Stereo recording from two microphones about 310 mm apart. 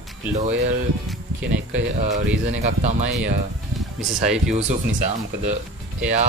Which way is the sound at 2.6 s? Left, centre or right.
Right.